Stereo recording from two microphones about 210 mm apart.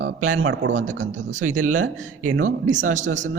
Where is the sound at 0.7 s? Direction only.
35° right (ahead or behind).